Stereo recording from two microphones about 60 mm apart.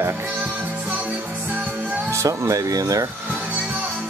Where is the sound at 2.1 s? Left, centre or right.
Right.